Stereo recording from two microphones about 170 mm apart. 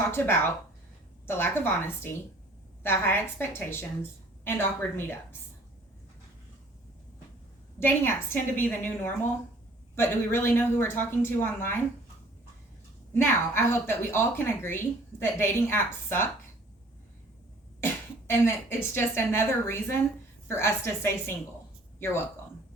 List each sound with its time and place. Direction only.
0.0 s a woman's voice: 15° left (ahead or behind)
7.8 s a woman's voice: 15° left (ahead or behind)
13.1 s a woman's voice: 15° left (ahead or behind)
18.3 s a woman's voice: 15° left (ahead or behind)